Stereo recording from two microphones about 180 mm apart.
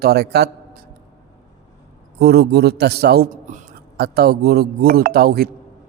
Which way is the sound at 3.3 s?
45° right (ahead or behind).